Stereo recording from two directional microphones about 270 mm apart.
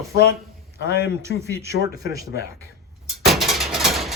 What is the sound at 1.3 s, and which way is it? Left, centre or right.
Speech, left.